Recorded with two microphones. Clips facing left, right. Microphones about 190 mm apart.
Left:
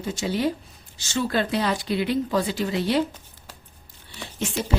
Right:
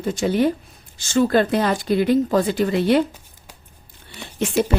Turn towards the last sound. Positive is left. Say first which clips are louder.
# right 8 dB
turn(degrees=-55)  # may be behind; listen again after turning